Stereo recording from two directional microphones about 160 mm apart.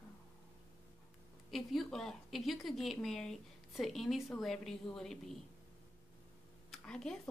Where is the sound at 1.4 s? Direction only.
Centre (ahead or behind).